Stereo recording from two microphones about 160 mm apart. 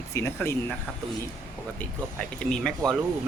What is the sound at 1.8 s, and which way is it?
Speech, 10° left (ahead or behind).